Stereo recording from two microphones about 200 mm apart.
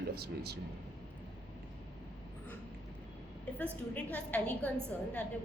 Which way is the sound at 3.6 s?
5° left (ahead or behind).